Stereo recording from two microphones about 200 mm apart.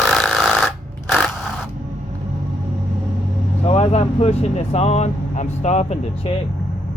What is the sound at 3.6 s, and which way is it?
Speech, 30° left (ahead or behind).